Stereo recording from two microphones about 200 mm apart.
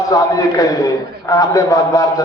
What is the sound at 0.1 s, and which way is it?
A man's voice, 20° left (ahead or behind).